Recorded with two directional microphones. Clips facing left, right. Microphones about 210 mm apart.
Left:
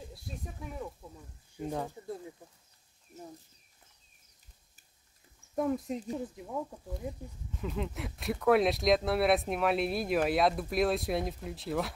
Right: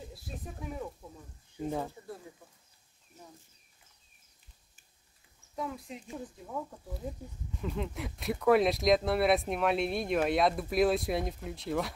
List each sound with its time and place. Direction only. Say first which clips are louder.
0.1 s a sound: right 1 dB; centre (ahead or behind)
1.6 s speech: right 1 dB; 5° right (ahead or behind)
5.6 s speech: left 8 dB; 45° left (ahead or behind)
6.3 s speech: left 2 dB; 15° left (ahead or behind)
7.5 s speech: even; centre (ahead or behind)